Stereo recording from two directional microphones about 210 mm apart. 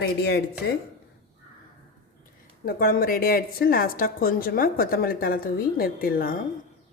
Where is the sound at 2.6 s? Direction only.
45° left (ahead or behind).